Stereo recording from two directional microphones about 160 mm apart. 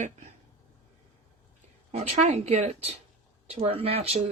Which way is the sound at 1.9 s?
45° right (ahead or behind).